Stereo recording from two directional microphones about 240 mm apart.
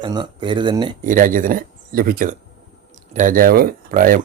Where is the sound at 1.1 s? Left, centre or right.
Right.